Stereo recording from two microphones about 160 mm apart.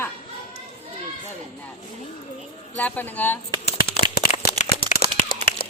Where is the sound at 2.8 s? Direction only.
10° left (ahead or behind).